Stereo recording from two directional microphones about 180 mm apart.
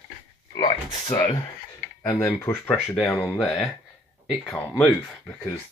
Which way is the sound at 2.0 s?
15° left (ahead or behind).